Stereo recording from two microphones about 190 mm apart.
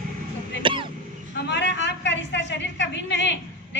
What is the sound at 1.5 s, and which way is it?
A woman's voice, 70° left (ahead or behind).